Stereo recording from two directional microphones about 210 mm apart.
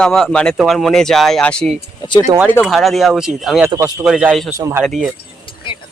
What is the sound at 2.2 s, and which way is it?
Speech, 15° right (ahead or behind).